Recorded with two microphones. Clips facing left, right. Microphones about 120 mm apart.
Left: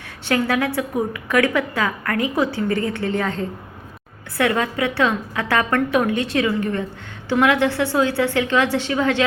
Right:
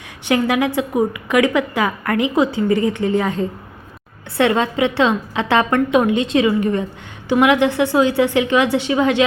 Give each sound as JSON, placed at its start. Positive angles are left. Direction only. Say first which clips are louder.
{"t": 0.3, "sound": "a woman's voice", "louder": "right 3 dB", "side_deg": -15}